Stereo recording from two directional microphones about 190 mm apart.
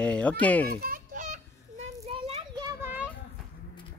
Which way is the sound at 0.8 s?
50° right (ahead or behind).